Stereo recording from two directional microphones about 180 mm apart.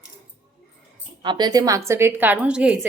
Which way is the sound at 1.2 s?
25° right (ahead or behind).